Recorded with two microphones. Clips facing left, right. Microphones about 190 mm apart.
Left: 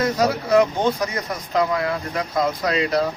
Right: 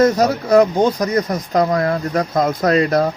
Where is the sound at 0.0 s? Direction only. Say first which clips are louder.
Right 6 dB; 45° right (ahead or behind).